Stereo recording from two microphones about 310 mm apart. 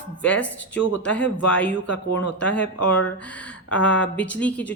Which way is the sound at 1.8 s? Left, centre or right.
Left.